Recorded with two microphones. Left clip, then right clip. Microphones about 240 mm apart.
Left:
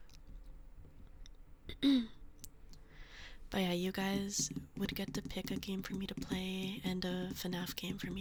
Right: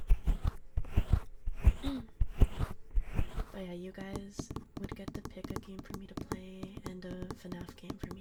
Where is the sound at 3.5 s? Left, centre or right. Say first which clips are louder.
Left 9 dB; left.